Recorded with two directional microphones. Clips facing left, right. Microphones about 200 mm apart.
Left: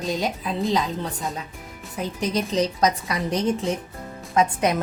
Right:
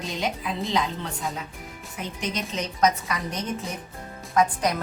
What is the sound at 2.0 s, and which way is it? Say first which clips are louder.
A woman's voice: left 6 dB; 35° left (ahead or behind).